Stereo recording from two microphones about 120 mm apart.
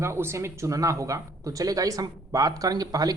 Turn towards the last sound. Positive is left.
turn(degrees=-30)  # may be behind; listen again after turning